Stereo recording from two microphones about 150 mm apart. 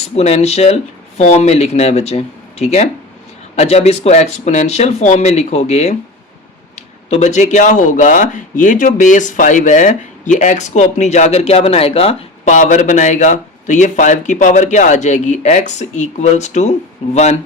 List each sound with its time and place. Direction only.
0.2 s speech: 45° left (ahead or behind)
12.5 s speech: 55° left (ahead or behind)